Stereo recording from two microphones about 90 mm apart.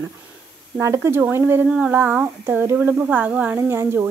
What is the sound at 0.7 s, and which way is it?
A woman's voice, 30° right (ahead or behind).